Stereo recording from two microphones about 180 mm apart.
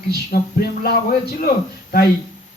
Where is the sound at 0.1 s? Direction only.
55° left (ahead or behind).